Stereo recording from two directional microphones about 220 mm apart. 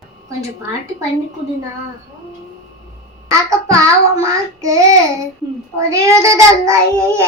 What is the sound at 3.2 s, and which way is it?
A child's voice, 15° right (ahead or behind).